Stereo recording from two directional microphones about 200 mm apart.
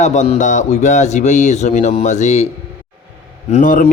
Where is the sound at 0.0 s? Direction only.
35° left (ahead or behind).